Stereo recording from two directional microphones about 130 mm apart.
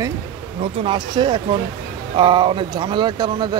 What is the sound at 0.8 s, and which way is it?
Speech, 40° right (ahead or behind).